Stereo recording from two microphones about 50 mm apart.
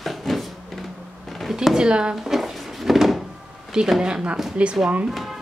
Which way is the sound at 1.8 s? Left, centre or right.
Centre.